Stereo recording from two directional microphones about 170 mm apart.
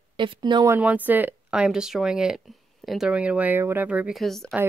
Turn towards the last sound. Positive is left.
turn(degrees=0)  # may be behind; listen again after turning